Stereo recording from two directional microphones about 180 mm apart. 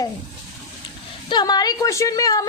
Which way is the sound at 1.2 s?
25° left (ahead or behind).